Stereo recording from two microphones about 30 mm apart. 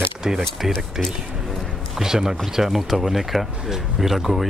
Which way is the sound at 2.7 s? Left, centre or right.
Centre.